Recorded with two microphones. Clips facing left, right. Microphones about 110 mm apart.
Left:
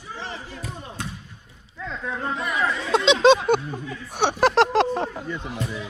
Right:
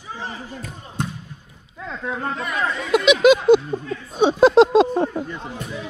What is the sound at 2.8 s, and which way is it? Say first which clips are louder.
Speech: right 4 dB; 30° left (ahead or behind).